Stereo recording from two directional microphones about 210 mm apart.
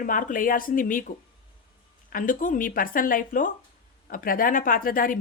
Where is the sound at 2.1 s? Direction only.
40° left (ahead or behind).